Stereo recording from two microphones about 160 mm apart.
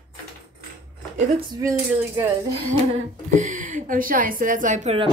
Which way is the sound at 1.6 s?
20° right (ahead or behind).